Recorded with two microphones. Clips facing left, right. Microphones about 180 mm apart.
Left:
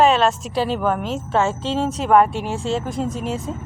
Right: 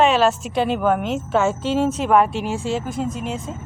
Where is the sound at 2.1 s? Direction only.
Centre (ahead or behind).